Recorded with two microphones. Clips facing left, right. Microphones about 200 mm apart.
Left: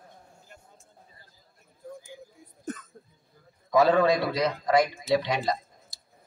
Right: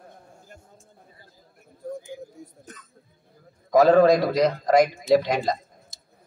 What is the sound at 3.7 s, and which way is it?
A man's voice, 45° right (ahead or behind).